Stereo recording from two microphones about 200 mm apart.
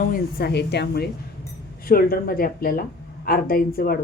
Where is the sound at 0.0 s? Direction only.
50° left (ahead or behind).